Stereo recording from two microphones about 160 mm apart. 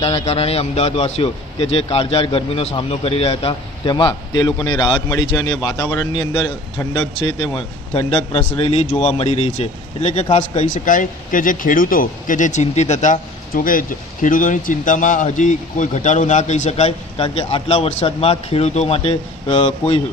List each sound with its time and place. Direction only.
0.0 s a man's voice: 40° left (ahead or behind)